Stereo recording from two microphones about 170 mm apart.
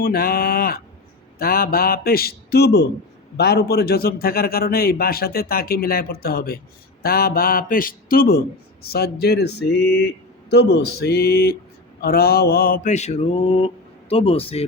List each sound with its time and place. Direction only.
0.0 s a man's voice: 60° left (ahead or behind)
12.0 s mantra: 65° left (ahead or behind); by 13.7 s 35° left (ahead or behind)
14.1 s speech: 35° left (ahead or behind)